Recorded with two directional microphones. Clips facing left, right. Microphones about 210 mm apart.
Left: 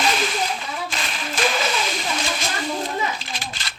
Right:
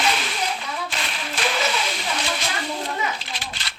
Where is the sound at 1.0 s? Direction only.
45° left (ahead or behind).